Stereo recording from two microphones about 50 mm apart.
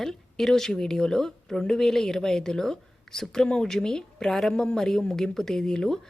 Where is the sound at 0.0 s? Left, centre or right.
Centre.